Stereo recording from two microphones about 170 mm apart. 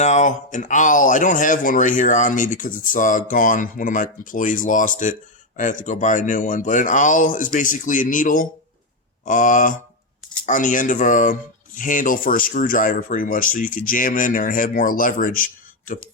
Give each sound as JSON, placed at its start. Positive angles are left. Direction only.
{"t": 0.0, "sound": "speech", "side_deg": 45}